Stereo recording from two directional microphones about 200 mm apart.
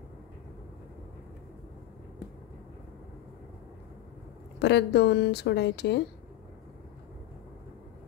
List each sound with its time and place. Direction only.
4.6 s speech: 55° left (ahead or behind)